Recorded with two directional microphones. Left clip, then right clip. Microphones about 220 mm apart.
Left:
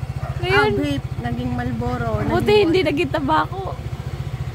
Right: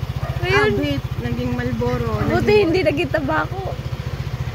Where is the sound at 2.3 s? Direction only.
20° left (ahead or behind).